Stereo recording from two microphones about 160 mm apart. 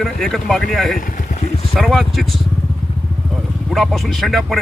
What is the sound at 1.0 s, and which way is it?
Vehicle, 55° left (ahead or behind).